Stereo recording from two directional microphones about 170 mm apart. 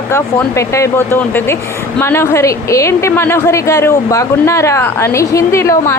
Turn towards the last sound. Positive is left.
turn(degrees=15)  # may be behind; listen again after turning